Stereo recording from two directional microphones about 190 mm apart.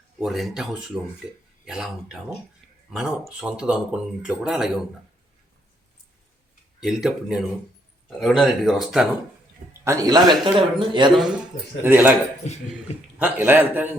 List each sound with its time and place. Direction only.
0.2 s speech: centre (ahead or behind)
0.9 s a man's voice: 15° right (ahead or behind)
1.6 s speech: 5° right (ahead or behind)
6.7 s speech: centre (ahead or behind)
9.8 s a man's voice: 15° right (ahead or behind)
11.1 s a man's voice: centre (ahead or behind)